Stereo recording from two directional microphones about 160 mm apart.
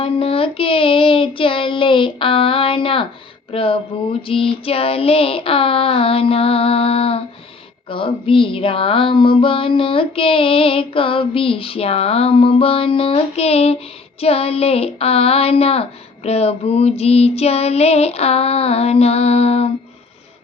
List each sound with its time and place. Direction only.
0.0 s speech: 35° left (ahead or behind)